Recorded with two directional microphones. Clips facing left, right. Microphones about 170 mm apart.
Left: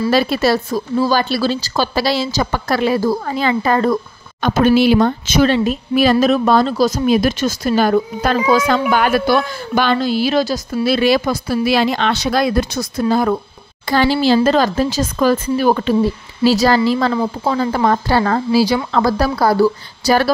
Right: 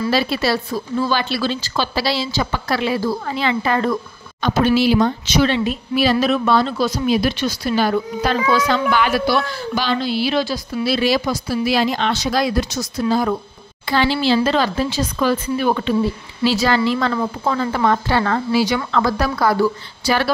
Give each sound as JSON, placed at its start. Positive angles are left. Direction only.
{"t": 0.1, "sound": "a woman's voice", "side_deg": 45}
{"t": 17.1, "sound": "a woman's voice", "side_deg": 20}
{"t": 17.6, "sound": "speech", "side_deg": 35}